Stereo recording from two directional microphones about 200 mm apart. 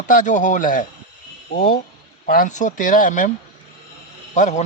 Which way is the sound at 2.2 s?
45° left (ahead or behind).